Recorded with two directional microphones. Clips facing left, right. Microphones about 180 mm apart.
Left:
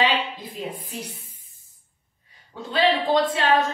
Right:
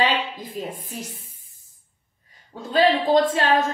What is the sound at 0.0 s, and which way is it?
A woman's voice, 45° right (ahead or behind).